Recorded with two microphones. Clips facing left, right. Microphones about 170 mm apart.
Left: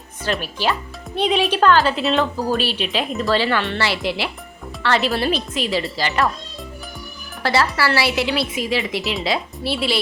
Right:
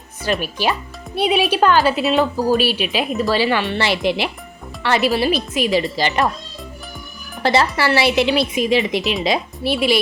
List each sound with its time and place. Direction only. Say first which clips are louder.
0.3 s speech: right 2 dB; 15° right (ahead or behind)
7.4 s a woman's voice: right 2 dB; 20° right (ahead or behind)